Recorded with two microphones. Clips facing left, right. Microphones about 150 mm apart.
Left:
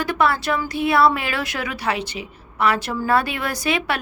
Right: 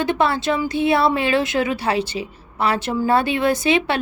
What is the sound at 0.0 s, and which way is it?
A woman's voice, 25° right (ahead or behind).